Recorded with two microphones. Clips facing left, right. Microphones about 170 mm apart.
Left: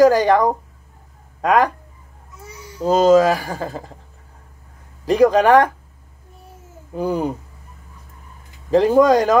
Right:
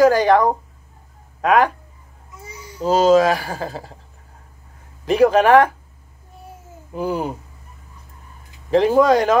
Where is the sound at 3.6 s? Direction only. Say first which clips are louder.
Left 1 dB; 35° right (ahead or behind).